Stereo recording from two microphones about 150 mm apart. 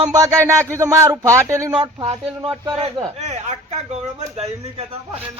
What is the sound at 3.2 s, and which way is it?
Speech, 50° right (ahead or behind).